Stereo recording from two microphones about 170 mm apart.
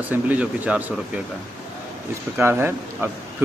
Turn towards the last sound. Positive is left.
turn(degrees=-10)  # may be behind; listen again after turning